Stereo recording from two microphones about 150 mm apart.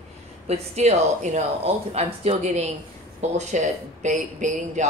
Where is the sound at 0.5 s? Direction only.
45° right (ahead or behind).